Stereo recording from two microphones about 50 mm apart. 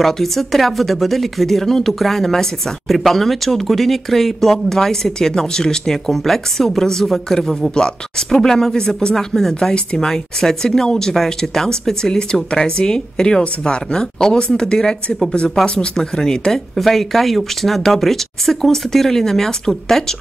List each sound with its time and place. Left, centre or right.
0.0 s speech: centre